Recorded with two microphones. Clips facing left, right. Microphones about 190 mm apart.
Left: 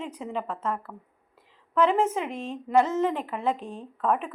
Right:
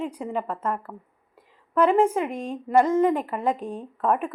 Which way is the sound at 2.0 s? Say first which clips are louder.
Right 4 dB; 5° right (ahead or behind).